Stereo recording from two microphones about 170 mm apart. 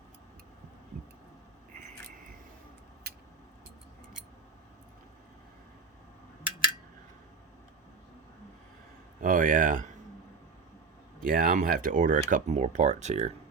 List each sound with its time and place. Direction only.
9.2 s speech: 55° right (ahead or behind)
11.2 s speech: 55° right (ahead or behind)